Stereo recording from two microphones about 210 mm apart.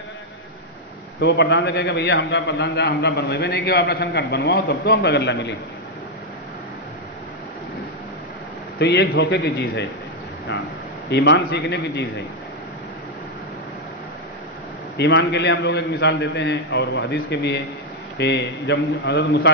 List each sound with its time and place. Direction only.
1.2 s a man's voice: 55° left (ahead or behind)
8.7 s a man's voice: 55° left (ahead or behind)
11.1 s a man's voice: 55° left (ahead or behind)
15.0 s a man's voice: 55° left (ahead or behind)